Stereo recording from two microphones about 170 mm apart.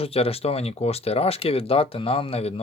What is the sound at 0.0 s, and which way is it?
Speech, 35° left (ahead or behind).